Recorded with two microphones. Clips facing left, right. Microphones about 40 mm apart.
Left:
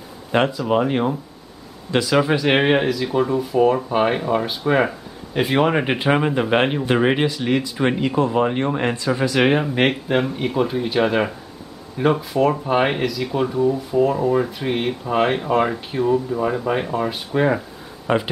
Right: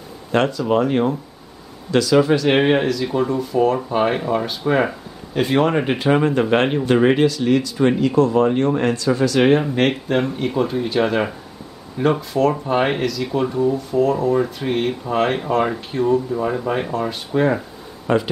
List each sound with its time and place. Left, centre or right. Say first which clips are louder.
0.3 s speech: right 1 dB; centre